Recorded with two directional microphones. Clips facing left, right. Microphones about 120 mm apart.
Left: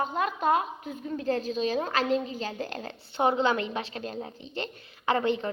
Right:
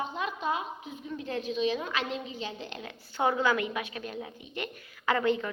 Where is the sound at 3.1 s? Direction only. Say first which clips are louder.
Left 2 dB; 25° left (ahead or behind).